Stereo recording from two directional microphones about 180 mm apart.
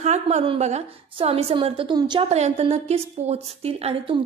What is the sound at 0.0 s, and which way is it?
A woman's voice, 40° right (ahead or behind).